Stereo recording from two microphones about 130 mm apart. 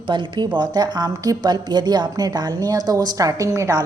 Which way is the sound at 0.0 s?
40° right (ahead or behind).